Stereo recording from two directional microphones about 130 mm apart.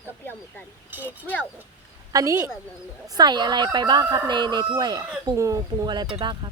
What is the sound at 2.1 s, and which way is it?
A woman's voice, 25° right (ahead or behind).